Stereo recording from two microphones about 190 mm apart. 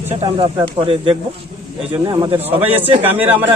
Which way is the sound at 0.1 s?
30° right (ahead or behind).